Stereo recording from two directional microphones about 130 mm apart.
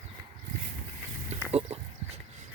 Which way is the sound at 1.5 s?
50° right (ahead or behind).